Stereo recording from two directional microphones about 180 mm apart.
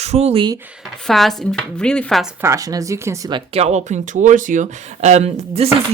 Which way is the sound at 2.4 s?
20° right (ahead or behind).